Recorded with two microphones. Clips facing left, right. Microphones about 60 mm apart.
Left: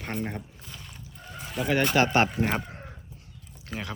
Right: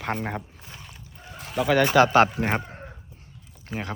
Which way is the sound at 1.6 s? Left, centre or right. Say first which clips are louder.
Right 5 dB; right.